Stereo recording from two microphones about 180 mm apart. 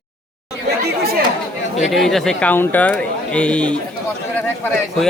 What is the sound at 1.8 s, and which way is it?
Speech, centre (ahead or behind).